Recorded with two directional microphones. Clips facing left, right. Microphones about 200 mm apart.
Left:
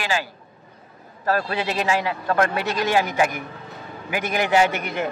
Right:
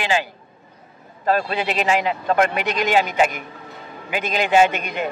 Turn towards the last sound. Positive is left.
turn(degrees=-20)  # may be behind; listen again after turning